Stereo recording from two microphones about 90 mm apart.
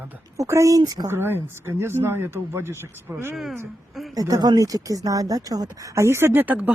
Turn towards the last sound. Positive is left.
turn(degrees=-20)  # may be behind; listen again after turning